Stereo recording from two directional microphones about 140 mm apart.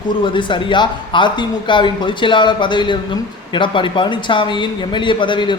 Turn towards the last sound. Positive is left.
turn(degrees=35)  # may be behind; listen again after turning